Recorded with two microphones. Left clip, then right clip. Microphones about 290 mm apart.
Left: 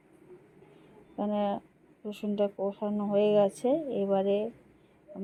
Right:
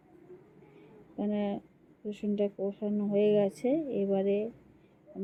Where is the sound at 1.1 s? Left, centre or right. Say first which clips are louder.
Left 4 dB; left.